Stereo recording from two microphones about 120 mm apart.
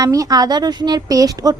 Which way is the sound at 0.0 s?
30° right (ahead or behind).